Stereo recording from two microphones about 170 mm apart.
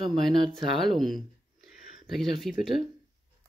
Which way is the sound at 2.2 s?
Centre (ahead or behind).